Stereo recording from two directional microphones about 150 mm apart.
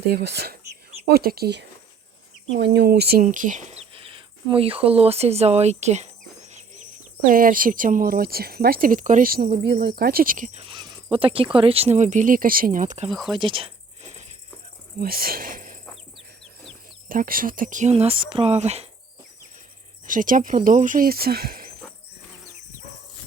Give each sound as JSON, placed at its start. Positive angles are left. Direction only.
{"t": 0.1, "sound": "speech", "side_deg": -90}
{"t": 2.6, "sound": "speech", "side_deg": -90}
{"t": 7.3, "sound": "speech", "side_deg": -70}
{"t": 10.6, "sound": "cricket", "side_deg": -35}
{"t": 11.5, "sound": "speech", "side_deg": -40}
{"t": 13.1, "sound": "speech", "side_deg": 0}
{"t": 13.4, "sound": "a sound", "side_deg": -35}
{"t": 14.9, "sound": "speech", "side_deg": -80}
{"t": 17.1, "sound": "speech", "side_deg": -70}
{"t": 20.1, "sound": "speech", "side_deg": -60}